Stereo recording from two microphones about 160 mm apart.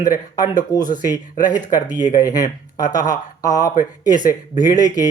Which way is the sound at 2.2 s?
20° left (ahead or behind).